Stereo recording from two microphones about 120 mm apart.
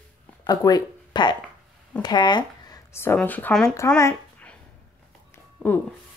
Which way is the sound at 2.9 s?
20° left (ahead or behind).